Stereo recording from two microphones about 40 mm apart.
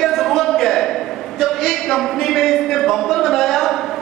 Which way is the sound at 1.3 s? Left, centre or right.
Centre.